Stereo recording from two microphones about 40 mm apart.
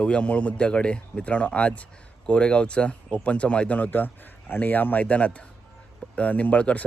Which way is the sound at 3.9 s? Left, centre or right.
Left.